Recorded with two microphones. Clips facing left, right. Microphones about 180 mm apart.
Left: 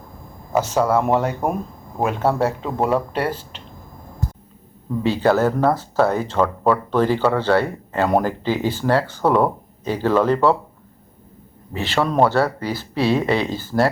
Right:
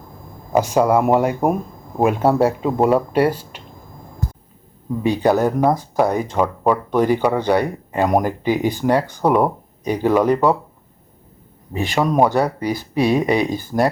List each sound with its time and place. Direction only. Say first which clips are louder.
0.5 s speech: right 3 dB; 15° right (ahead or behind)
5.0 s speech: right 1 dB; 15° right (ahead or behind)
11.7 s speech: right 2 dB; 15° right (ahead or behind)